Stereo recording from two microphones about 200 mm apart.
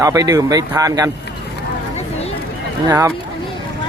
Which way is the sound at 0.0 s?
15° right (ahead or behind).